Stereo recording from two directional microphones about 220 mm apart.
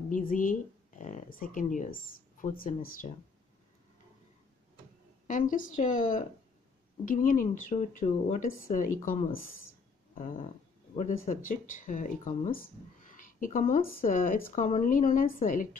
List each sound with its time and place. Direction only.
0.3 s speech: 40° left (ahead or behind)
5.3 s speech: 35° left (ahead or behind)
10.1 s a sound: 40° left (ahead or behind)
11.0 s speech: 35° left (ahead or behind)